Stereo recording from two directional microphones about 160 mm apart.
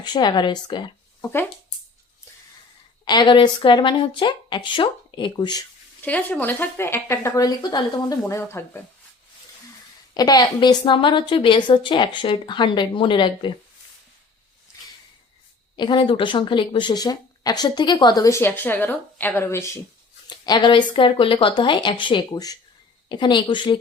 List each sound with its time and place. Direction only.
0.0 s speech: 25° left (ahead or behind)
1.2 s speech: 15° left (ahead or behind)
3.0 s speech: 25° left (ahead or behind)
6.1 s speech: 10° left (ahead or behind)
10.2 s a woman's voice: 25° left (ahead or behind)
15.7 s speech: 30° left (ahead or behind)